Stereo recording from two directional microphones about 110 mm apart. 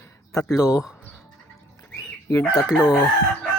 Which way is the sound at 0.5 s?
30° left (ahead or behind).